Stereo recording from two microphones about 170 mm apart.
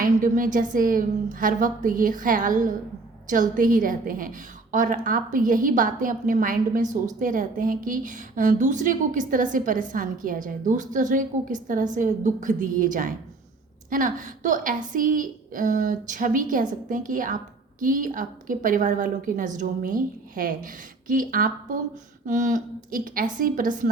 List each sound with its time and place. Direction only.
0.0 s a woman's voice: 55° right (ahead or behind)